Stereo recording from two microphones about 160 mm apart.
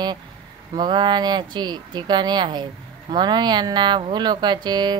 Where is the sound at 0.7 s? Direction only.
30° right (ahead or behind).